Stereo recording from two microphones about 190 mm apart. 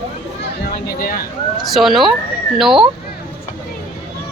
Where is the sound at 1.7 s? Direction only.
Centre (ahead or behind).